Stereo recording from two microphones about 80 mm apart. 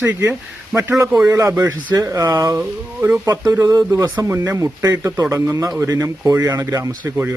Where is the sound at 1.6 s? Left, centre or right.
Right.